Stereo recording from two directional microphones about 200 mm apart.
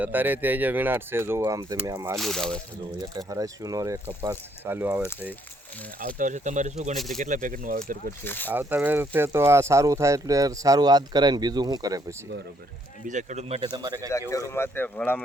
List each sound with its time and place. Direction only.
0.0 s speech: 10° right (ahead or behind)
2.1 s speech: centre (ahead or behind)
3.0 s speech: 15° right (ahead or behind)
6.1 s speech: 40° right (ahead or behind)
6.9 s speech: centre (ahead or behind)
7.2 s speech: 40° right (ahead or behind)
8.2 s speech: 10° left (ahead or behind)
8.5 s speech: 10° right (ahead or behind)
13.1 s speech: 35° right (ahead or behind)
13.7 s speech: 20° right (ahead or behind)
14.1 s speech: 15° left (ahead or behind)